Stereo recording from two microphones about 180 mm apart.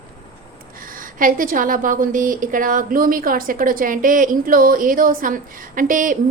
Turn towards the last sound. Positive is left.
turn(degrees=-45)  # may be behind; listen again after turning